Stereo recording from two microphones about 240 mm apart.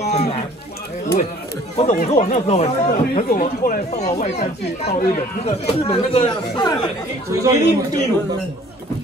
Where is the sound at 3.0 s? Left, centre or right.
Left; by 7.0 s centre.